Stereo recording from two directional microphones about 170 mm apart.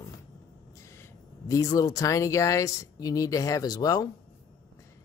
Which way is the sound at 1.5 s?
20° left (ahead or behind).